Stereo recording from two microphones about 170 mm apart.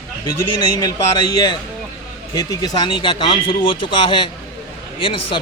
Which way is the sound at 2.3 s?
25° left (ahead or behind).